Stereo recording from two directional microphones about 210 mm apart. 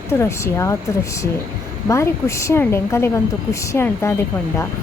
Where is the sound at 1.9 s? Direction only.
15° left (ahead or behind).